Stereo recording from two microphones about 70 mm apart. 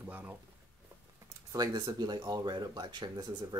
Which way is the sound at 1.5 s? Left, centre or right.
Right.